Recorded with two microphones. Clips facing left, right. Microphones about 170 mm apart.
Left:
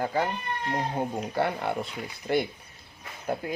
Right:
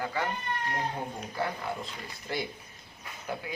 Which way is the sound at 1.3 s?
65° left (ahead or behind).